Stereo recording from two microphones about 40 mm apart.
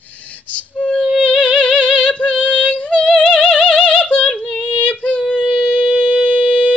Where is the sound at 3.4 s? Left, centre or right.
Left.